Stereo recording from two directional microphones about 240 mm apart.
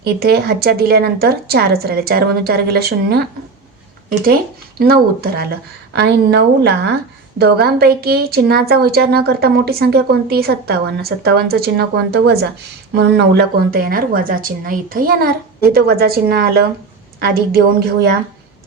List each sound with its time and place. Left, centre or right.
0.0 s a woman's voice: right
4.8 s a woman's voice: right